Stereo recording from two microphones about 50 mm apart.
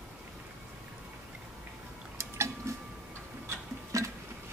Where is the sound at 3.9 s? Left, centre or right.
Right.